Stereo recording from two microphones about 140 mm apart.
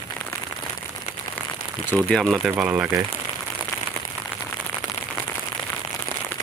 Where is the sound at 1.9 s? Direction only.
5° left (ahead or behind); by 2.9 s 10° right (ahead or behind).